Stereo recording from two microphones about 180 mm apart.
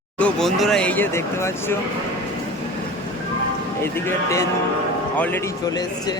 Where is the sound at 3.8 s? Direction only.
15° left (ahead or behind).